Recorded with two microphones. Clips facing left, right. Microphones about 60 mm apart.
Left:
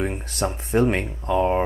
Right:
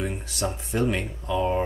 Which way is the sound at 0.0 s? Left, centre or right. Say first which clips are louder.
Left 4 dB; left.